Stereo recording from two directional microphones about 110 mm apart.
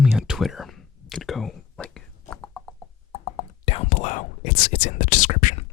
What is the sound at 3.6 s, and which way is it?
Whispering, 55° left (ahead or behind).